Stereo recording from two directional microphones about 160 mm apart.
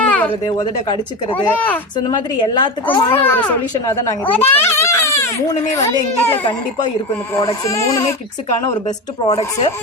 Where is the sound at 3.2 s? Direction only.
15° left (ahead or behind).